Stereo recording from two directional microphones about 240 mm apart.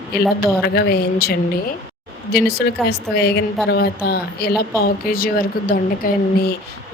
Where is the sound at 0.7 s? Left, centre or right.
Left.